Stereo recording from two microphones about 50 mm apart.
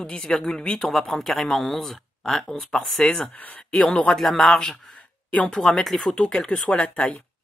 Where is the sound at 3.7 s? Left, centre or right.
Centre.